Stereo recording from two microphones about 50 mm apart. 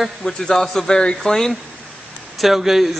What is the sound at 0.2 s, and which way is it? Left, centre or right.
Speech, centre.